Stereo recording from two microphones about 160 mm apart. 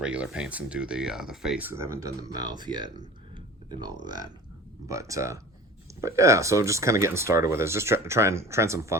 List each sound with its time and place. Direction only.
0.0 s speech: 5° right (ahead or behind); by 2.9 s 25° right (ahead or behind)
3.3 s a sound: 25° right (ahead or behind)
4.0 s speech: 25° right (ahead or behind)